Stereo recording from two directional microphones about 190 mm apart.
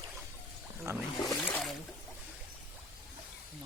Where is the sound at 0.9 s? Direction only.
15° right (ahead or behind).